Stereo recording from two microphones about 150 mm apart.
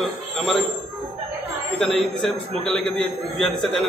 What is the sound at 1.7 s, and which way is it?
A man's voice, centre (ahead or behind).